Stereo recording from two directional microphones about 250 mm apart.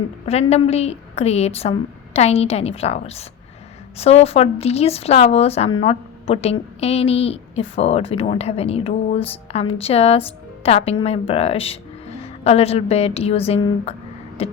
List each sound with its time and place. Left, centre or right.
0.3 s speech: left
14.4 s music: left